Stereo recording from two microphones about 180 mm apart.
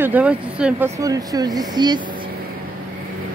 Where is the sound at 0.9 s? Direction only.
20° right (ahead or behind).